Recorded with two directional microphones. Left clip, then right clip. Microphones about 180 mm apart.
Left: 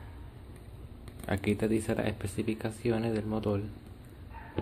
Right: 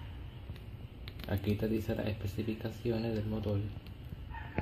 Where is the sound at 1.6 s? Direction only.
30° left (ahead or behind).